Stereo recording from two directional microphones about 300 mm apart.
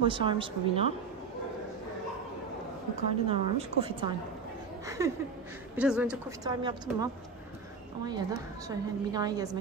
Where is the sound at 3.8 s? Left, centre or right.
Centre.